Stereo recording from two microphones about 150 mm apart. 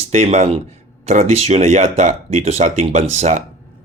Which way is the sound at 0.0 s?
45° right (ahead or behind).